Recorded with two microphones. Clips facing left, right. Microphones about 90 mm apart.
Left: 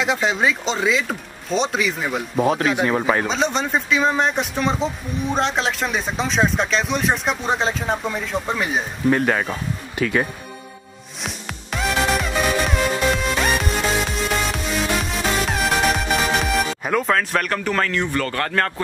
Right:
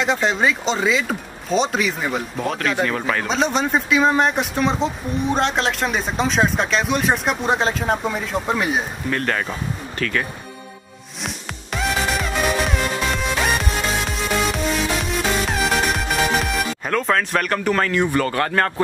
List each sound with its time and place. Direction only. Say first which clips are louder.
0.0 s speech: right 1 dB; centre (ahead or behind); by 3.3 s 20° left (ahead or behind)
3.3 s speech: right 1 dB; centre (ahead or behind)
9.1 s speech: left 2 dB; 10° left (ahead or behind)
11.2 s music: even; centre (ahead or behind)